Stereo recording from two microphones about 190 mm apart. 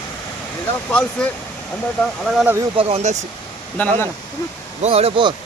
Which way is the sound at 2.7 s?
30° right (ahead or behind).